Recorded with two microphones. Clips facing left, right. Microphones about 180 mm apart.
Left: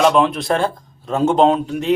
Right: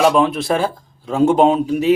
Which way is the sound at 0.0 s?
5° right (ahead or behind).